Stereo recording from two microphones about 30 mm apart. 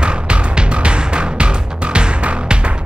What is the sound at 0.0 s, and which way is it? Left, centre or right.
Music, right.